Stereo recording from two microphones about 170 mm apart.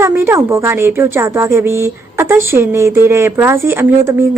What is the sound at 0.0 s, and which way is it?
A woman's voice, 15° right (ahead or behind).